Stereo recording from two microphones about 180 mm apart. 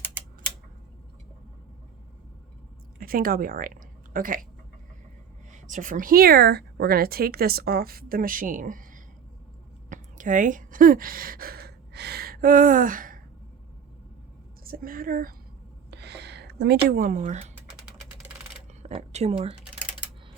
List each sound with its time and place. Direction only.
3.0 s a woman's voice: 55° right (ahead or behind)
5.5 s a woman's voice: 45° right (ahead or behind)
14.6 s a woman's voice: 55° right (ahead or behind)
15.9 s a sound: 70° right (ahead or behind)
16.9 s speech: 45° right (ahead or behind)
18.8 s speech: 40° right (ahead or behind)
19.6 s typing: 5° right (ahead or behind)